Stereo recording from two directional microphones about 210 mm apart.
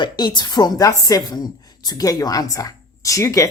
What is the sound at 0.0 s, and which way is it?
A woman's voice, 20° left (ahead or behind).